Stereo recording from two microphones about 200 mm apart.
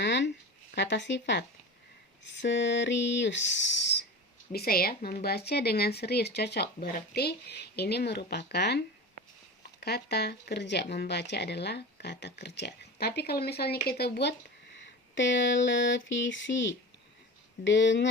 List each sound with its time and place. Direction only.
0.0 s a sound: 60° left (ahead or behind)
0.8 s speech: 60° left (ahead or behind)
4.5 s speech: 50° left (ahead or behind)
9.8 s speech: 55° left (ahead or behind)
14.8 s a sound: 65° left (ahead or behind)
17.6 s speech: 65° left (ahead or behind)